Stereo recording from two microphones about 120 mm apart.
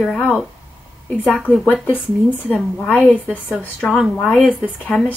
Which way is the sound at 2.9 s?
5° left (ahead or behind).